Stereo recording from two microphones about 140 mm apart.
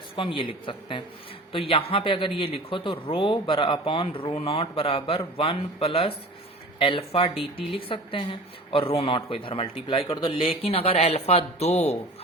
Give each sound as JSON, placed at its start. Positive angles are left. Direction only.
{"t": 0.2, "sound": "speech", "side_deg": 40}